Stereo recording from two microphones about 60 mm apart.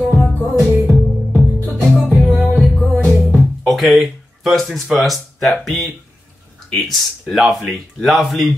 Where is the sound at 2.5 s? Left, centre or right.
Centre.